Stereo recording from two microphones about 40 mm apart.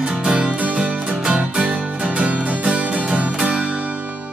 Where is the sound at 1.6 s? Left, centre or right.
Right.